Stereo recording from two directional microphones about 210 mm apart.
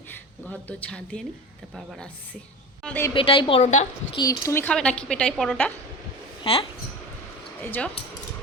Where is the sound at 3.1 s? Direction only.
25° left (ahead or behind).